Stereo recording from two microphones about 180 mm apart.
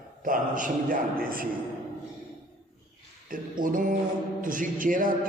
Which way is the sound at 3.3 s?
50° right (ahead or behind).